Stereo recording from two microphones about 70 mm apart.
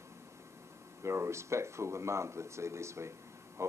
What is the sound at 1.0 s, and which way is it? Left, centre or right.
Speech, right.